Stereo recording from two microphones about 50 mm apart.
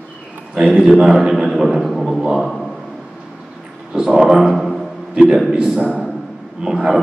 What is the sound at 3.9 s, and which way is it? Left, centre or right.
Speech, centre.